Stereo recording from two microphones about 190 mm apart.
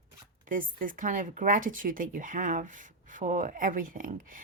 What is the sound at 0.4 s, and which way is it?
Speech, 45° right (ahead or behind).